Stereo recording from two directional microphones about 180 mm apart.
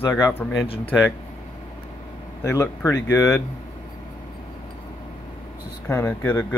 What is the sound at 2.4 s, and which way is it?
Speech, 15° left (ahead or behind).